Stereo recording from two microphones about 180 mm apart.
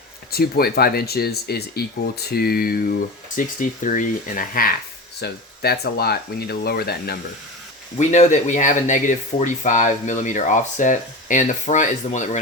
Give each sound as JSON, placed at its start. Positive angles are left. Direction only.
{"t": 0.3, "sound": "speech", "side_deg": 60}
{"t": 5.2, "sound": "speech", "side_deg": 60}
{"t": 7.9, "sound": "speech", "side_deg": 40}